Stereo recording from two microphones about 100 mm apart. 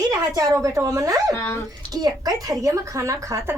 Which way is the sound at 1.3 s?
25° left (ahead or behind).